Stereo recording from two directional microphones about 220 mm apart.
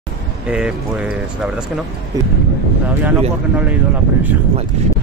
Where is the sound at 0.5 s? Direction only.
5° right (ahead or behind).